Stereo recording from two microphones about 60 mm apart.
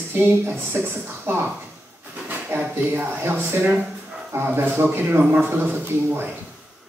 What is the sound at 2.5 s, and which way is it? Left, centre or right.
Speech, right.